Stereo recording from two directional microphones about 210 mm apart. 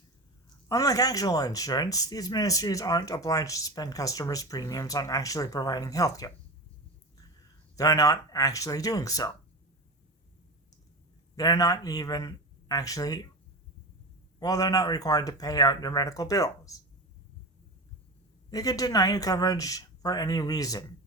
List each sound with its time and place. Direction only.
0.7 s speech: 15° left (ahead or behind)
7.8 s speech: 15° left (ahead or behind)
11.3 s speech: 20° left (ahead or behind)
14.3 s speech: 15° left (ahead or behind)
18.5 s speech: 15° left (ahead or behind)